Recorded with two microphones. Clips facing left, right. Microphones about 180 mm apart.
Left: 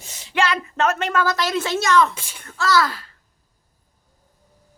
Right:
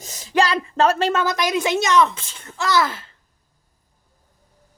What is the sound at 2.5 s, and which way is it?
Speech, 20° right (ahead or behind).